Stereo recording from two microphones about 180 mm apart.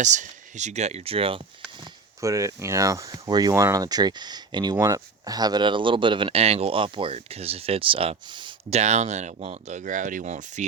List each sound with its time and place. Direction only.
0.0 s speech: 40° right (ahead or behind)
1.8 s speech: 20° right (ahead or behind); by 10.7 s 40° right (ahead or behind)